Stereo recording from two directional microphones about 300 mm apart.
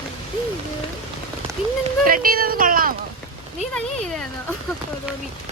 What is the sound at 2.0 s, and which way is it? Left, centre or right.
Speech, right.